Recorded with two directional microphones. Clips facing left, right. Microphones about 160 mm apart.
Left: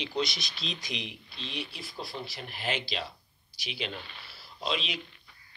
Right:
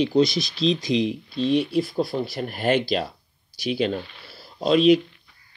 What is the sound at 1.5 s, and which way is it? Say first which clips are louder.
Speech: right 19 dB; 45° right (ahead or behind).